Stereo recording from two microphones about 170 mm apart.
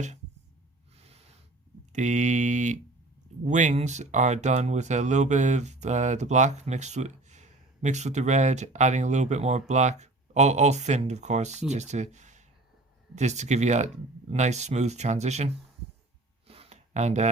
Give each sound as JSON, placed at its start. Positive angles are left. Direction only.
{"t": 0.9, "sound": "snort", "side_deg": -35}
{"t": 1.9, "sound": "speech", "side_deg": -45}
{"t": 16.5, "sound": "a sound", "side_deg": -35}